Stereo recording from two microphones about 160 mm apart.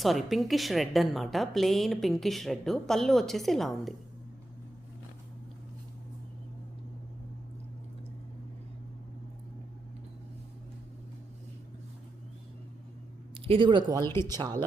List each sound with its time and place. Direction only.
0.0 s a woman's voice: centre (ahead or behind)
13.3 s speech: 35° right (ahead or behind)
14.0 s speech: 15° left (ahead or behind)
14.3 s speech: 25° right (ahead or behind)